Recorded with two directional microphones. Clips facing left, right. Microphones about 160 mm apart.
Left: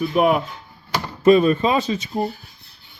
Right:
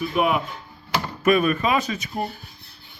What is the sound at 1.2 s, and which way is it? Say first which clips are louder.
Speech: left 6 dB; 25° left (ahead or behind).